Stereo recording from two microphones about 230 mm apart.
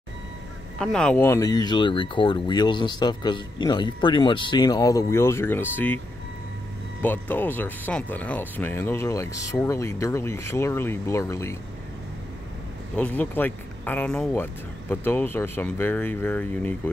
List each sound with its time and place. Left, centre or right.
0.7 s speech: centre
7.0 s speech: centre
12.9 s speech: centre